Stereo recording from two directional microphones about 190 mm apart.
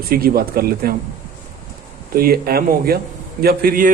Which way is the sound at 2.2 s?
50° right (ahead or behind).